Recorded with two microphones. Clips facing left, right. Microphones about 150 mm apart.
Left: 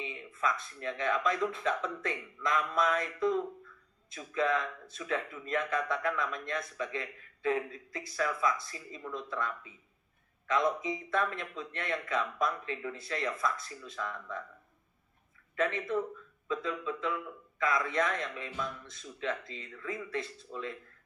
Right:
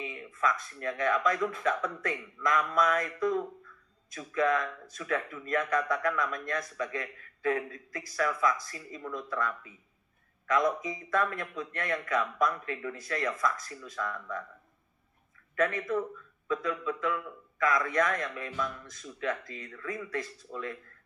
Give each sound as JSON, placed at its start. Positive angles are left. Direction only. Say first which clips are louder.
{"t": 0.0, "sound": "a man's voice", "louder": "right 3 dB", "side_deg": 25}
{"t": 4.1, "sound": "a man's voice", "louder": "right 3 dB", "side_deg": 25}
{"t": 15.5, "sound": "a man's voice", "louder": "right 2 dB", "side_deg": 25}